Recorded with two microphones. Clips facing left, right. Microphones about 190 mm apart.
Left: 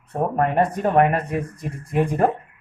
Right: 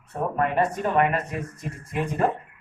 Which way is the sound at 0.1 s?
50° left (ahead or behind).